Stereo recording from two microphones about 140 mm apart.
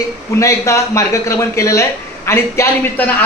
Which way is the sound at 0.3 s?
20° left (ahead or behind).